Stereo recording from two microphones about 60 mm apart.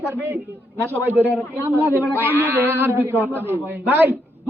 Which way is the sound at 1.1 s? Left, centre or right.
Right.